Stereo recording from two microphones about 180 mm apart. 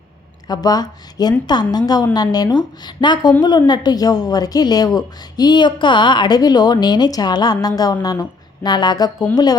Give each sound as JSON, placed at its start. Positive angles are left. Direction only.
{"t": 0.4, "sound": "a woman's voice", "side_deg": 20}